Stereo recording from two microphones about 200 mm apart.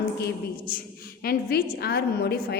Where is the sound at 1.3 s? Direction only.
50° left (ahead or behind).